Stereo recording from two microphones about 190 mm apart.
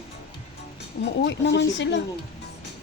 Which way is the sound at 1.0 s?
65° left (ahead or behind).